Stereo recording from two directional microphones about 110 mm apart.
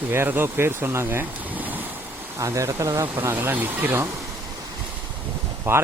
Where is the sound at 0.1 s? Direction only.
20° right (ahead or behind).